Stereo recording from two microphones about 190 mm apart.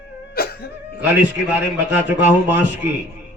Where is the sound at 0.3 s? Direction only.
55° left (ahead or behind).